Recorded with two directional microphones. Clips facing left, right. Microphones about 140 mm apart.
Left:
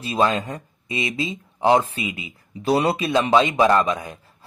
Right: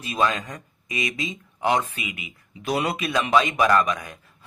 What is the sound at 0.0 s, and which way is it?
Speech, 30° left (ahead or behind).